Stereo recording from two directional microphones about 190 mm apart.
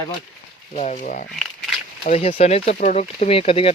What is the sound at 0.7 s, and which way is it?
Speech, 40° left (ahead or behind).